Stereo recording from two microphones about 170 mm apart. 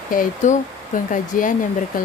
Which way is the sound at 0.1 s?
55° left (ahead or behind).